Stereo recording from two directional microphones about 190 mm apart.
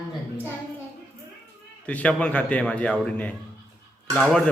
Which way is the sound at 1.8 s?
5° left (ahead or behind).